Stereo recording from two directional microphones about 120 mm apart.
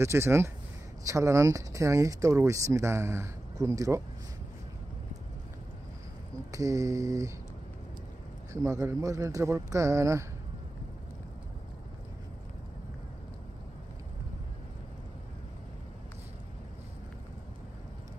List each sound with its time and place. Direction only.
0.0 s speech: 25° right (ahead or behind)
6.5 s speech: 30° right (ahead or behind)
8.5 s speech: 25° right (ahead or behind)